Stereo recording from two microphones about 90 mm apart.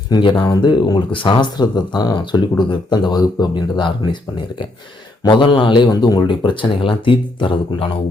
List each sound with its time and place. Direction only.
0.2 s speech: 60° left (ahead or behind)
1.1 s speech: 70° left (ahead or behind); by 6.2 s 50° left (ahead or behind)
6.2 s speech: 65° left (ahead or behind)